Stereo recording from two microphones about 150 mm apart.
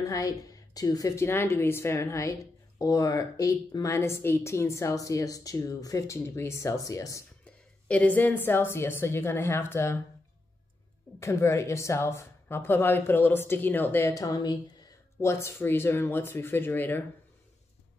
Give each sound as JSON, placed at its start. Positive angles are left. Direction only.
{"t": 0.0, "sound": "a woman's voice", "side_deg": 25}
{"t": 7.4, "sound": "a woman's voice", "side_deg": 10}
{"t": 11.1, "sound": "a woman's voice", "side_deg": 20}